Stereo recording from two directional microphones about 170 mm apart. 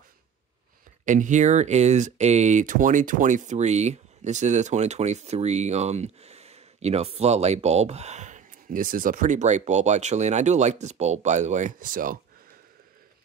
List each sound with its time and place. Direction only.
1.0 s speech: 45° right (ahead or behind)